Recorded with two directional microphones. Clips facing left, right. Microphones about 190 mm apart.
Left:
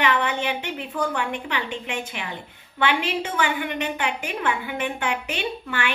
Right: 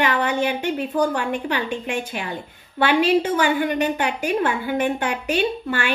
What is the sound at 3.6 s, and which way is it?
A woman's voice, 35° right (ahead or behind).